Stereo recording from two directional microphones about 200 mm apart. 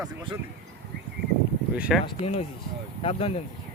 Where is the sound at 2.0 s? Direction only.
30° left (ahead or behind).